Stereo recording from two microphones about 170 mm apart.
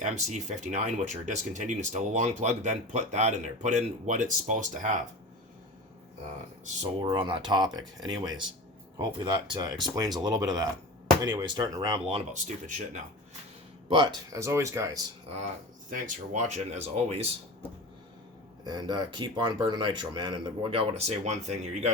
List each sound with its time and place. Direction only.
0.0 s speech: 45° right (ahead or behind)
7.1 s speech: 30° right (ahead or behind)
12.1 s speech: 45° right (ahead or behind)
14.3 s speech: 15° right (ahead or behind)
15.9 s speech: 50° right (ahead or behind)
18.6 s speech: 25° right (ahead or behind); by 21.9 s 45° right (ahead or behind)